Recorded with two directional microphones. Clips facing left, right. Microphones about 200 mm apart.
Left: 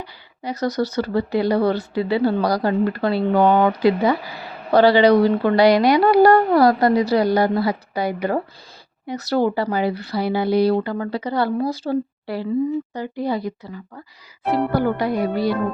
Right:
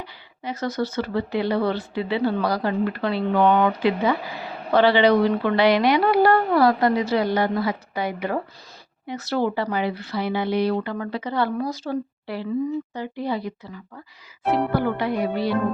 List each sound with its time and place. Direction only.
0.0 s speech: 40° left (ahead or behind)